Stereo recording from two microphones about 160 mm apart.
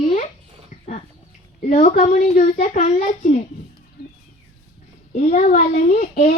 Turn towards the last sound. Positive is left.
turn(degrees=50)  # may be behind; listen again after turning